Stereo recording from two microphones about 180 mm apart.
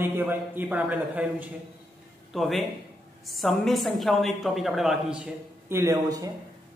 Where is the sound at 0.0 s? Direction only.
10° right (ahead or behind).